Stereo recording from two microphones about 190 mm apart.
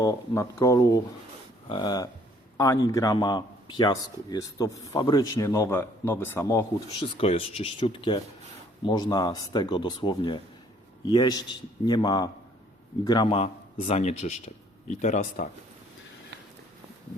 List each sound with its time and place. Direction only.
0.0 s a man's voice: 15° left (ahead or behind)
7.2 s a man's voice: 30° left (ahead or behind)